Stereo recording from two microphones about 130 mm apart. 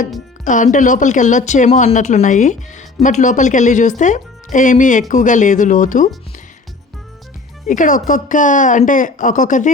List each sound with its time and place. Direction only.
0.4 s speech: 75° left (ahead or behind)
7.7 s speech: 90° left